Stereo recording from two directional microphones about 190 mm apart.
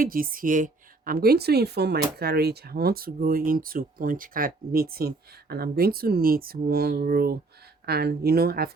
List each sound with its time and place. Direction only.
0.0 s a woman's voice: 50° right (ahead or behind)